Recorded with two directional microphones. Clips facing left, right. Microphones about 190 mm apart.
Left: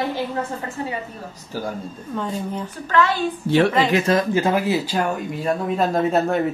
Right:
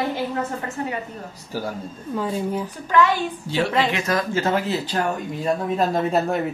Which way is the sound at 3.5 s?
60° left (ahead or behind).